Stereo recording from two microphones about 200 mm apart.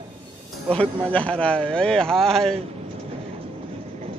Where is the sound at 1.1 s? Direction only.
5° left (ahead or behind).